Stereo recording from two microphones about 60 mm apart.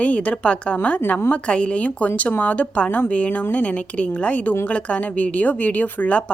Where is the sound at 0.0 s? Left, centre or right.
Left.